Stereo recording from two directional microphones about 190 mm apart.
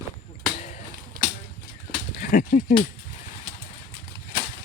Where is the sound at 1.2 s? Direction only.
50° right (ahead or behind).